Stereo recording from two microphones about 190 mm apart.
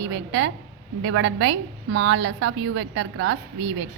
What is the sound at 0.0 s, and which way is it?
A woman's voice, 75° right (ahead or behind).